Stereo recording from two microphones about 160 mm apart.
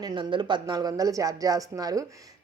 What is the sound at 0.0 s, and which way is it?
A woman's voice, 30° right (ahead or behind).